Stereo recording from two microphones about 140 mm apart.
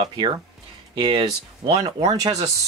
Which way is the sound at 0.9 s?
35° right (ahead or behind).